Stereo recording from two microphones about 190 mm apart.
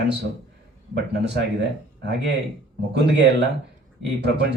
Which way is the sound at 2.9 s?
65° right (ahead or behind).